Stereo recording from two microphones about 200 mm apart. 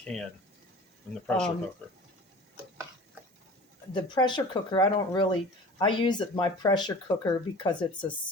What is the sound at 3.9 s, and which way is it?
Speech, 20° left (ahead or behind).